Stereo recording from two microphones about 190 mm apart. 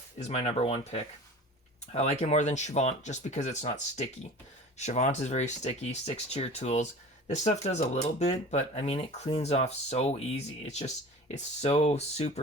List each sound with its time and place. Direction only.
0.2 s speech: 35° left (ahead or behind)